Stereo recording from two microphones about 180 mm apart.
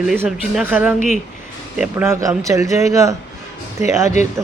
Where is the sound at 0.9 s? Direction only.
40° left (ahead or behind).